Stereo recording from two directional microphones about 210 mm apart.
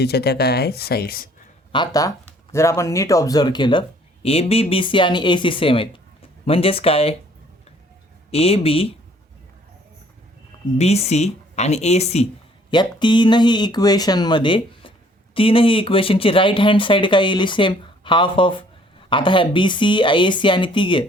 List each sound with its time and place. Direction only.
0.0 s speech: 50° left (ahead or behind)
1.7 s speech: 20° left (ahead or behind)
8.3 s speech: 30° left (ahead or behind)
10.8 s speech: 30° left (ahead or behind)